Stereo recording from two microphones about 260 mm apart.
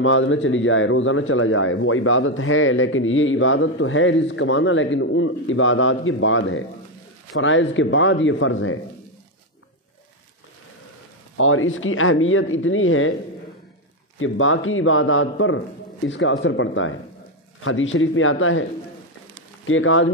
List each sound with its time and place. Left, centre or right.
0.0 s a man's voice: left
11.3 s a man's voice: left
14.1 s a man's voice: left